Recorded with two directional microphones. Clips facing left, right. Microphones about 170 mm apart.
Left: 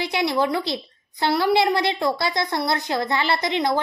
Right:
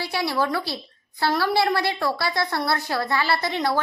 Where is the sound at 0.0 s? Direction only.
20° left (ahead or behind).